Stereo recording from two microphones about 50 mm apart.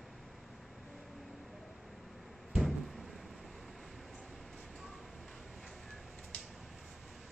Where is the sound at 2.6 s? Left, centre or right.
Centre.